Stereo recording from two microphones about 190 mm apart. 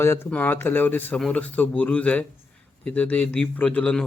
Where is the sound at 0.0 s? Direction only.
10° left (ahead or behind).